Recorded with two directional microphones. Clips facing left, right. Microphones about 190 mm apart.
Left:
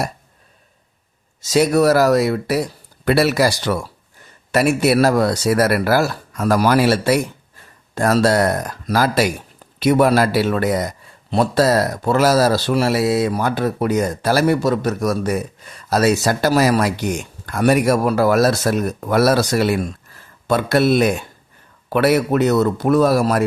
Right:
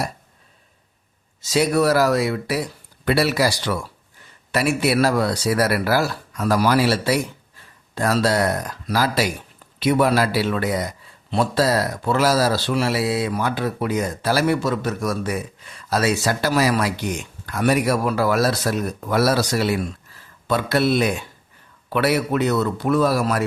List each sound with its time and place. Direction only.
1.4 s a man's voice: 45° left (ahead or behind)